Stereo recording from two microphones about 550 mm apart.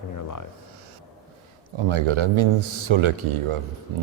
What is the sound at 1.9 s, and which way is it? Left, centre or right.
A man's voice, right.